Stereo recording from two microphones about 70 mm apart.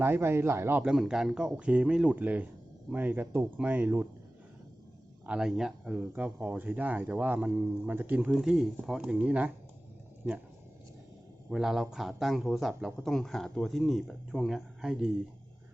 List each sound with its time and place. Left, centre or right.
0.0 s speech: right
0.9 s speech: centre
2.1 s speech: right
5.2 s speech: centre; by 8.2 s right
8.3 s speech: centre; by 10.4 s right
11.5 s speech: centre
14.8 s speech: centre